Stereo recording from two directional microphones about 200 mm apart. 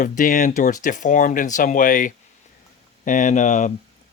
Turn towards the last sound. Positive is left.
turn(degrees=40)  # may be behind; listen again after turning